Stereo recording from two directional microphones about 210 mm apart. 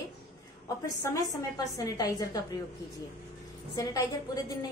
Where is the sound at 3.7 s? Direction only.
15° left (ahead or behind).